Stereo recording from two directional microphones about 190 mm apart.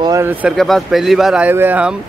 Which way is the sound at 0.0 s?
15° right (ahead or behind).